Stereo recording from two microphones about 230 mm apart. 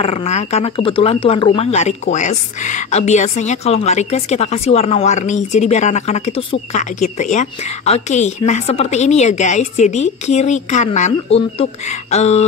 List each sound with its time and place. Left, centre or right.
0.0 s speech: left